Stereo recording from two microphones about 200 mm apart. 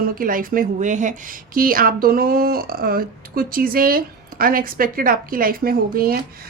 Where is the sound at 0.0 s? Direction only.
45° right (ahead or behind).